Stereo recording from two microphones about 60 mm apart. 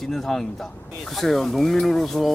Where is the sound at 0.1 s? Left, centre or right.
Centre.